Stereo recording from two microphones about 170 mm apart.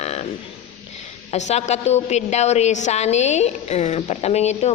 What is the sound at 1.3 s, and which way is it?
A woman's voice, 40° left (ahead or behind).